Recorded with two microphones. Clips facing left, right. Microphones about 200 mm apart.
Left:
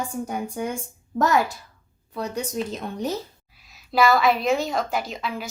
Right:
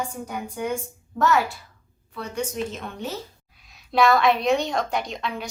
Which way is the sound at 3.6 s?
Centre (ahead or behind).